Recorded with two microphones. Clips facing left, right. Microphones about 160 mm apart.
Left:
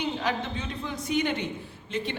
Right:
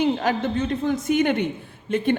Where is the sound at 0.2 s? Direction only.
50° right (ahead or behind).